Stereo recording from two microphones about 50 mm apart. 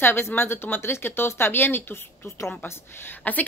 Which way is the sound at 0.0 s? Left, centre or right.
Left.